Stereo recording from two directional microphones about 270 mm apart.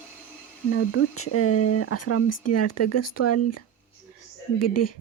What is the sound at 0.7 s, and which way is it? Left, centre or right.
Speech, left.